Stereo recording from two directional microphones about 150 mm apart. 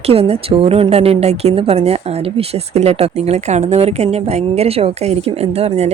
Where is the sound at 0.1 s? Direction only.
40° right (ahead or behind).